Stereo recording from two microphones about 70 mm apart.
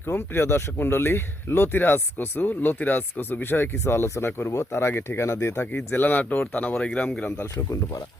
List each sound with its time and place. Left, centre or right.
0.0 s speech: left; by 7.1 s centre
7.5 s speech: left